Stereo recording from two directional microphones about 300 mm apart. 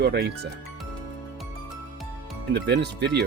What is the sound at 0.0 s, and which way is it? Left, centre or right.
Speech, right.